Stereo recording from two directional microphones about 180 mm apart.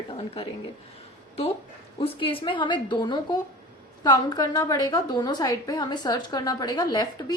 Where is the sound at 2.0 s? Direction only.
30° left (ahead or behind).